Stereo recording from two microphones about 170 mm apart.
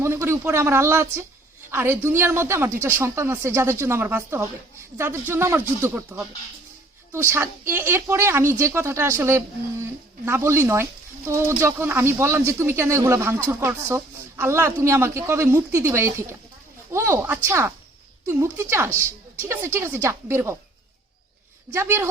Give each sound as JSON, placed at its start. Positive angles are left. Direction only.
{"t": 0.0, "sound": "speech", "side_deg": -15}
{"t": 21.7, "sound": "speech", "side_deg": -15}